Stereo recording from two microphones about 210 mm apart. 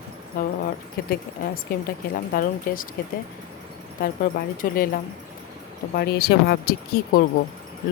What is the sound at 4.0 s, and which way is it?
A woman's voice, 40° left (ahead or behind).